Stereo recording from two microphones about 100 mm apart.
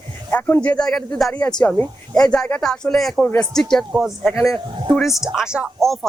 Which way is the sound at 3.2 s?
15° left (ahead or behind).